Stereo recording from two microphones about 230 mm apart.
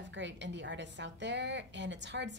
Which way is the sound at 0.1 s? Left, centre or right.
Right.